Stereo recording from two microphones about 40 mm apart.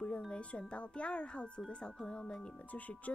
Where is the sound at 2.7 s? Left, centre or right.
Left.